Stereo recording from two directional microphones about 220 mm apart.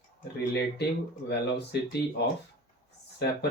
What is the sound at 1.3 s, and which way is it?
Speech, 50° left (ahead or behind).